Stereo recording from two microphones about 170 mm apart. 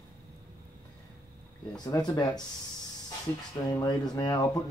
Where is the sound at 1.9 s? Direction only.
25° left (ahead or behind).